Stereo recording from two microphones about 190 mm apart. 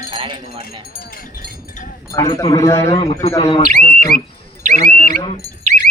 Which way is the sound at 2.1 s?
20° left (ahead or behind).